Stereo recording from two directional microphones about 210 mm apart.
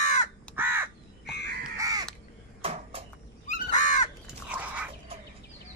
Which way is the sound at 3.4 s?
35° left (ahead or behind).